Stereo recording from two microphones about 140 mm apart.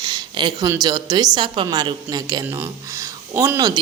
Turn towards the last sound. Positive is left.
turn(degrees=-20)  # may be behind; listen again after turning